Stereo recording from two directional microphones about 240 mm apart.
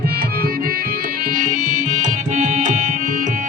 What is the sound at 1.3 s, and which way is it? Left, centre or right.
Music, right.